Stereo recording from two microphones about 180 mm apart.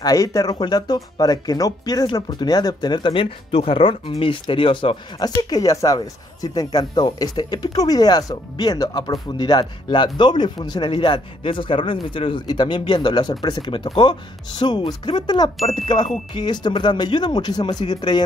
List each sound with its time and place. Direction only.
0.0 s speech: 20° left (ahead or behind)